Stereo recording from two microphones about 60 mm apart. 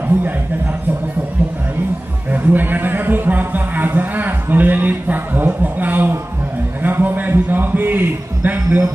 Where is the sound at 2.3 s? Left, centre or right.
Right.